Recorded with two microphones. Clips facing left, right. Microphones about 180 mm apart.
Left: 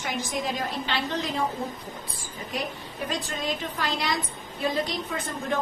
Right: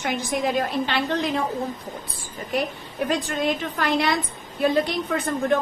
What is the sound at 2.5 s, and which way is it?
A woman's voice, 60° right (ahead or behind).